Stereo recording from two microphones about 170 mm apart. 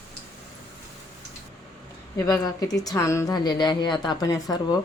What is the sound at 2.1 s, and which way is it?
A woman's voice, 20° left (ahead or behind).